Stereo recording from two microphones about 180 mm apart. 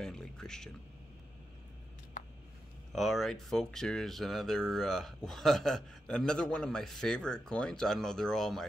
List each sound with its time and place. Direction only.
0.0 s speech: 5° left (ahead or behind)
2.2 s a sound: 45° left (ahead or behind)
2.9 s speech: centre (ahead or behind)